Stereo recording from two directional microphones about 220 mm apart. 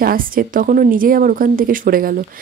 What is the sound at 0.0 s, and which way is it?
A woman's voice, 40° right (ahead or behind).